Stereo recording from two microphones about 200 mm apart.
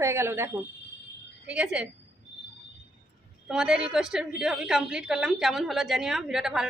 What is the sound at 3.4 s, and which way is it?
A woman's voice, centre (ahead or behind).